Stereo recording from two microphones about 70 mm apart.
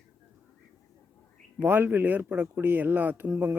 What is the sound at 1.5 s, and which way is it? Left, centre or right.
Speech, right.